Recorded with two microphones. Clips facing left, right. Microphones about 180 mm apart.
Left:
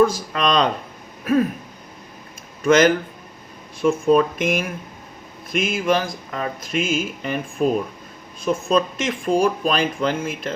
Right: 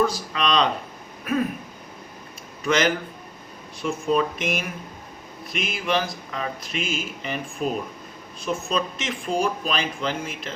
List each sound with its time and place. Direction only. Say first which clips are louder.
0.0 s speech: left 5 dB; 45° left (ahead or behind)
1.2 s throat clearing: left 6 dB; 40° left (ahead or behind)
2.6 s speech: left 7 dB; 45° left (ahead or behind)
8.7 s speech: left 7 dB; 50° left (ahead or behind)